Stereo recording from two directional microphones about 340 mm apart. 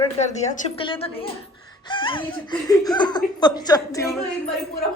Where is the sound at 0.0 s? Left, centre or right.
Centre.